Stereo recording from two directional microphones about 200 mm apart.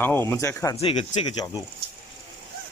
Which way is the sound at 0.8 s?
30° left (ahead or behind).